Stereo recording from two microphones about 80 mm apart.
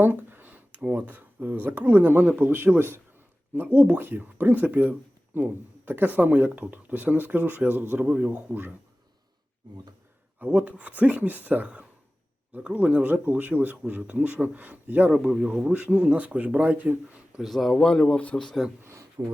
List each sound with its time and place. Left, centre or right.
0.0 s speech: right
10.4 s speech: centre
15.1 s speech: centre
15.7 s speech: right
17.4 s speech: centre
19.2 s speech: right